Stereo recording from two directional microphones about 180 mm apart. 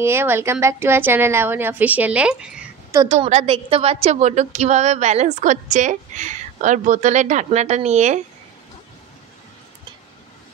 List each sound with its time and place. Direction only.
0.0 s a woman's voice: 15° right (ahead or behind)
3.1 s a woman's voice: 40° right (ahead or behind)